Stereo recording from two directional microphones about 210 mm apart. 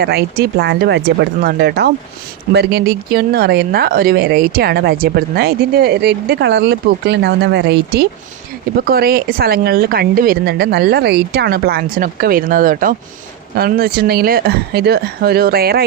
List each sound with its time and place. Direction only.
0.0 s speech: 50° right (ahead or behind)